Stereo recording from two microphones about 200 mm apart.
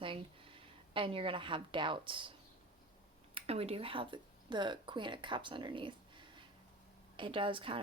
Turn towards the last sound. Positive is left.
turn(degrees=-25)  # may be behind; listen again after turning